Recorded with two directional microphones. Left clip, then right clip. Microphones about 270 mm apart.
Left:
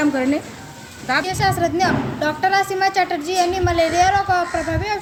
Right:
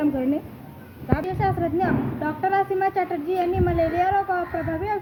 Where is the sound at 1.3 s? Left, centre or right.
Left.